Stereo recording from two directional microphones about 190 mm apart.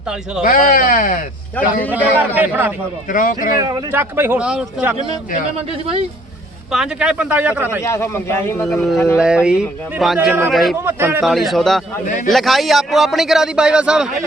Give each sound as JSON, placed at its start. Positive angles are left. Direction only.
{"t": 0.4, "sound": "speech", "side_deg": 45}
{"t": 1.9, "sound": "speech", "side_deg": -10}
{"t": 3.1, "sound": "speech", "side_deg": 45}
{"t": 3.6, "sound": "speech", "side_deg": -20}
{"t": 6.7, "sound": "speech", "side_deg": -5}
{"t": 7.8, "sound": "speech", "side_deg": 15}
{"t": 8.6, "sound": "a man's voice", "side_deg": 0}
{"t": 10.8, "sound": "speech", "side_deg": -10}
{"t": 11.2, "sound": "a man's voice", "side_deg": 0}
{"t": 12.0, "sound": "speech", "side_deg": 45}
{"t": 12.3, "sound": "a man's voice", "side_deg": 0}